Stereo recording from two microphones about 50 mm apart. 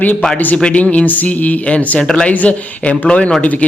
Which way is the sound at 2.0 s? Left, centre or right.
Centre.